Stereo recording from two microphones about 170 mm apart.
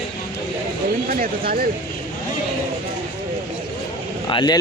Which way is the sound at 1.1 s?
60° right (ahead or behind).